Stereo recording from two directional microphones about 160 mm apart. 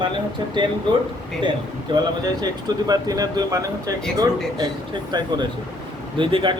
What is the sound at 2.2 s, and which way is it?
Speech, 25° right (ahead or behind).